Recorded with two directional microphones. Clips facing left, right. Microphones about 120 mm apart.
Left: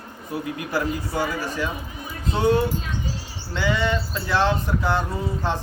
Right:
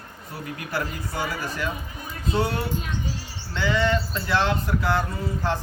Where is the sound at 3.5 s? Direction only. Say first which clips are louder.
Even; 15° left (ahead or behind).